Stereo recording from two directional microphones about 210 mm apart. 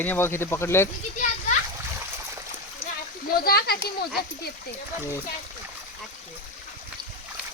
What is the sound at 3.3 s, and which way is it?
Speech, 45° left (ahead or behind).